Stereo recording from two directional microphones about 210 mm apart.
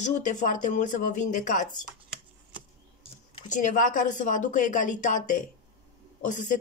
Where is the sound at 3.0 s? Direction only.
30° left (ahead or behind).